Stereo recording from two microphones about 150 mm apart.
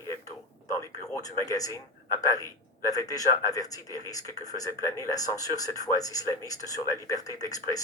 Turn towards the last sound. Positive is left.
turn(degrees=25)  # may be behind; listen again after turning